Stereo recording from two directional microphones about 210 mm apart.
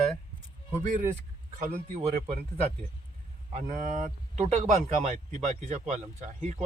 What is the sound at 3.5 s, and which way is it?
Speech, 40° right (ahead or behind).